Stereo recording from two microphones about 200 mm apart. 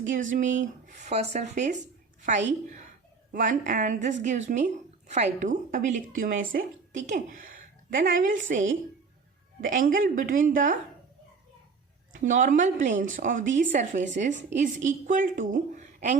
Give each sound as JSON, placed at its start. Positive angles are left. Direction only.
{"t": 0.1, "sound": "a woman's voice", "side_deg": -40}
{"t": 12.1, "sound": "speech", "side_deg": -40}